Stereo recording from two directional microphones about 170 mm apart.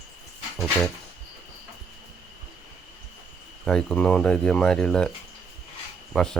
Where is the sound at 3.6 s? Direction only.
5° left (ahead or behind).